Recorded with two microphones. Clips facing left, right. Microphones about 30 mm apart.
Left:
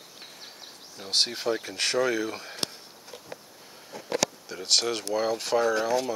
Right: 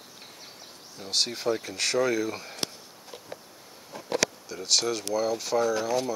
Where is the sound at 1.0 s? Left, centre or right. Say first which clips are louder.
Left 1 dB; left.